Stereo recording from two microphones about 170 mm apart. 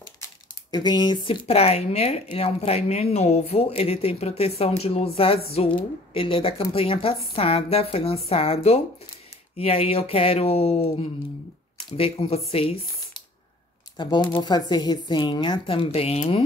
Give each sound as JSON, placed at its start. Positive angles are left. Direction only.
{"t": 0.7, "sound": "speech", "side_deg": 25}
{"t": 13.9, "sound": "speech", "side_deg": 25}